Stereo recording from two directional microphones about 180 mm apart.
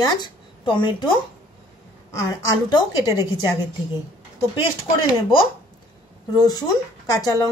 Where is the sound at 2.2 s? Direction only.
20° left (ahead or behind).